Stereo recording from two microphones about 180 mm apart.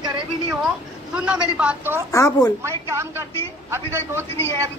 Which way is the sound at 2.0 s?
20° left (ahead or behind).